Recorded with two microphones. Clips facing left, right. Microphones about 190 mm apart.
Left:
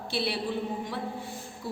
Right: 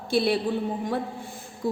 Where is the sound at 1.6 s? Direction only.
45° right (ahead or behind).